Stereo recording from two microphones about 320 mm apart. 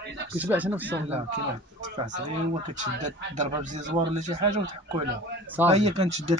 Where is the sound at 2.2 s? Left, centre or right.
Right.